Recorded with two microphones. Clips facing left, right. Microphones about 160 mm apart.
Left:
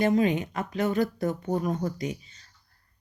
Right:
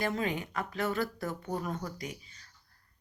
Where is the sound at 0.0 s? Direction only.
20° left (ahead or behind).